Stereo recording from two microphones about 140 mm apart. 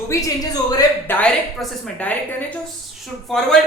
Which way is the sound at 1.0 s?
15° left (ahead or behind).